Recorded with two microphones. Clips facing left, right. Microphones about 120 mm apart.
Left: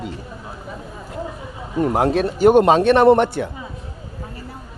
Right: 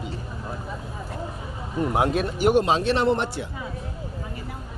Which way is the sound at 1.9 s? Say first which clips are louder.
Left 3 dB; 40° left (ahead or behind).